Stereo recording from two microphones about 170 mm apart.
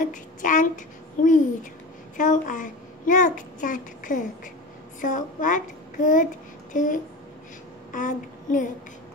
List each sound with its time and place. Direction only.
0.0 s a child's voice: 50° left (ahead or behind)
7.9 s child singing: 50° left (ahead or behind)